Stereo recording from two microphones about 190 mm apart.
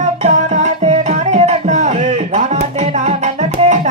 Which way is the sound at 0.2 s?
35° right (ahead or behind).